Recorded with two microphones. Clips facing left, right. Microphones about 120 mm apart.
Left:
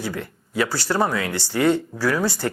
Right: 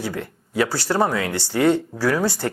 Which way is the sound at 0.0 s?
45° right (ahead or behind).